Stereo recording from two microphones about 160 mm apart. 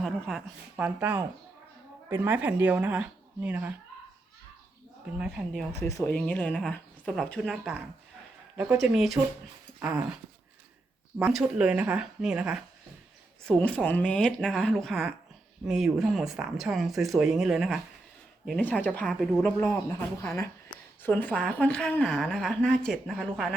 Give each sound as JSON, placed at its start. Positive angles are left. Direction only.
{"t": 0.0, "sound": "speech", "side_deg": 0}
{"t": 5.1, "sound": "speech", "side_deg": -5}
{"t": 6.1, "sound": "a woman's voice", "side_deg": 10}
{"t": 8.7, "sound": "a woman's voice", "side_deg": 0}
{"t": 11.2, "sound": "speech", "side_deg": -5}
{"t": 13.6, "sound": "a woman's voice", "side_deg": 5}